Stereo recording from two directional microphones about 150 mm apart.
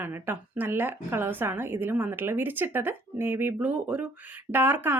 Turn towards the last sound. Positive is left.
turn(degrees=-15)  # may be behind; listen again after turning